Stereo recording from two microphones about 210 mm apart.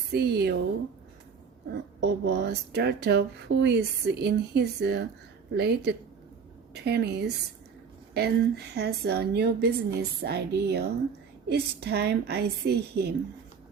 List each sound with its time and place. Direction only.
0.1 s speech: 50° right (ahead or behind)
2.0 s speech: 55° right (ahead or behind)